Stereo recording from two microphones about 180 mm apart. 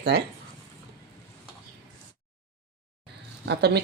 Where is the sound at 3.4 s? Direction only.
65° right (ahead or behind).